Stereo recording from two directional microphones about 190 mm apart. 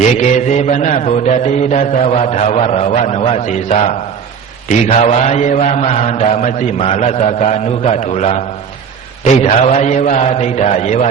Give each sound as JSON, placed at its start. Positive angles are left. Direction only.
{"t": 0.0, "sound": "a man's voice", "side_deg": 35}